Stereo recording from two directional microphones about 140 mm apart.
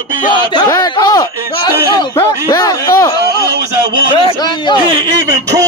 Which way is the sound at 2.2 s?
25° left (ahead or behind).